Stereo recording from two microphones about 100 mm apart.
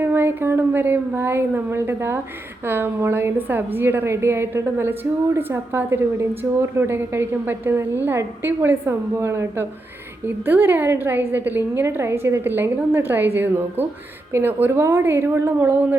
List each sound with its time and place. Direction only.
0.0 s a woman's voice: 20° right (ahead or behind)